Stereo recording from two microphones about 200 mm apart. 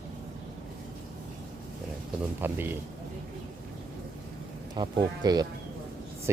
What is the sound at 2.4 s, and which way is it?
Speech, 10° right (ahead or behind).